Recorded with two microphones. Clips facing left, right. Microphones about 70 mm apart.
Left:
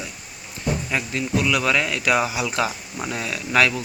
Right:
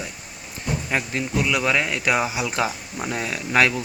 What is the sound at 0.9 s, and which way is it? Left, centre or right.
Speech, right.